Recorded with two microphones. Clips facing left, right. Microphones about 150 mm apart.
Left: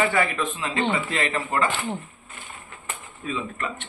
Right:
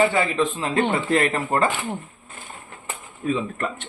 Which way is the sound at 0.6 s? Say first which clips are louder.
Right 3 dB; 45° right (ahead or behind).